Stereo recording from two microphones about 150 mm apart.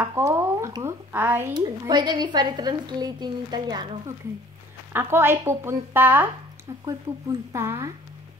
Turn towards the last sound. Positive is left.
turn(degrees=-15)  # may be behind; listen again after turning